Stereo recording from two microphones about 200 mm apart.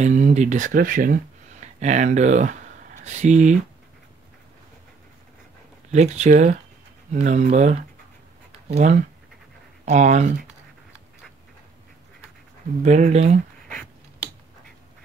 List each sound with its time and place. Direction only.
0.0 s speech: 35° right (ahead or behind)
5.9 s speech: 35° right (ahead or behind)
12.8 s speech: 35° right (ahead or behind)